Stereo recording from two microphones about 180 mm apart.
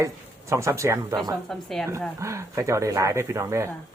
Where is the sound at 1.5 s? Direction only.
Centre (ahead or behind).